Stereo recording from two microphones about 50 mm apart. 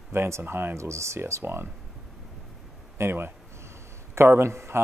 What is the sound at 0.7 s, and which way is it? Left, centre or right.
Speech, right.